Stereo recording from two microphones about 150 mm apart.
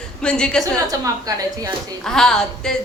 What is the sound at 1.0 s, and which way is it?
Speech, 20° right (ahead or behind).